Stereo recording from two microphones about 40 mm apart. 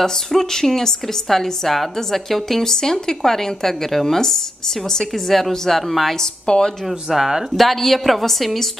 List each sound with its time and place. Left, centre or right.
0.0 s a woman's voice: centre
6.4 s a woman's voice: left
6.9 s speech: centre
7.5 s a woman's voice: centre